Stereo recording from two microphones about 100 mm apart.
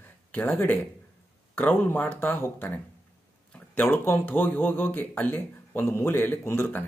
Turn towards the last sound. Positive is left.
turn(degrees=25)  # may be behind; listen again after turning